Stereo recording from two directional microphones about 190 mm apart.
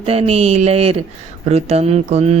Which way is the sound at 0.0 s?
30° right (ahead or behind).